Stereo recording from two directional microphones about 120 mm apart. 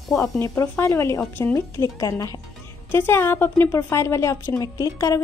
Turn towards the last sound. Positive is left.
turn(degrees=25)  # may be behind; listen again after turning